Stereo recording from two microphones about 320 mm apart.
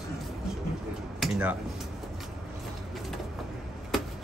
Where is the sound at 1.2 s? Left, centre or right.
Centre.